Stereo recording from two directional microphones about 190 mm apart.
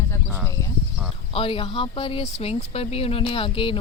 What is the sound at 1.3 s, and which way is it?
Speech, 30° left (ahead or behind).